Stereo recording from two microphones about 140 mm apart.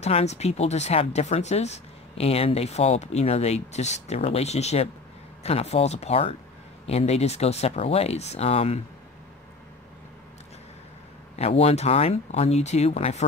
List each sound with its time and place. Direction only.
0.0 s speech: 50° left (ahead or behind)
11.3 s speech: 50° left (ahead or behind)